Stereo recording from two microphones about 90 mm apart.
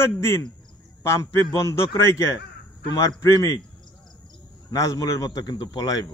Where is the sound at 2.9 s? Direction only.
45° left (ahead or behind).